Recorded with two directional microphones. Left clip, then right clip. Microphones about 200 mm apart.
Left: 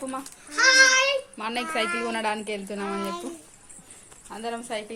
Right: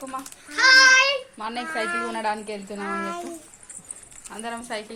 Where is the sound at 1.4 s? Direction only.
40° left (ahead or behind).